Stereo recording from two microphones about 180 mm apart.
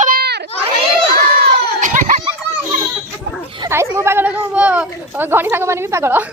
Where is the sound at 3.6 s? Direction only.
15° right (ahead or behind).